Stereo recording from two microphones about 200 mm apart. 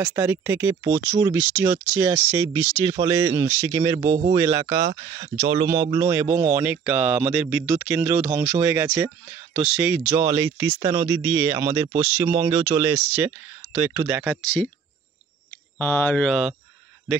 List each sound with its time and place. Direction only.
0.0 s speech: 15° right (ahead or behind)
15.8 s speech: 5° left (ahead or behind)